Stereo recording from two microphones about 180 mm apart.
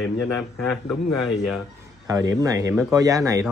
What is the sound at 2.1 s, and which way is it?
Speech, 20° right (ahead or behind).